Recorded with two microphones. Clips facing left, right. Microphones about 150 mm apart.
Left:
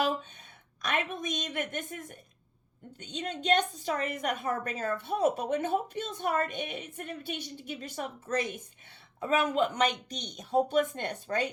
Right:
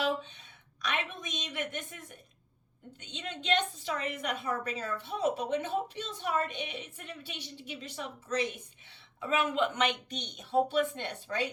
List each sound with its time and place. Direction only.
0.8 s a woman's voice: 45° left (ahead or behind)